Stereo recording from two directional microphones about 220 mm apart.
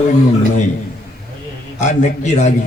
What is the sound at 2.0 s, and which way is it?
Speech, 30° left (ahead or behind).